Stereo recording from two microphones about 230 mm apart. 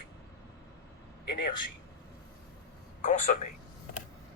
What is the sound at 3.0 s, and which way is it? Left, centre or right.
Speech, left.